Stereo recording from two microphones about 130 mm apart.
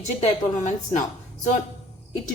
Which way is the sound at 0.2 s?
65° left (ahead or behind).